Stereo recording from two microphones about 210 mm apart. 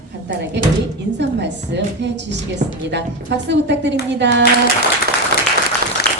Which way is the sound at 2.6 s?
35° right (ahead or behind).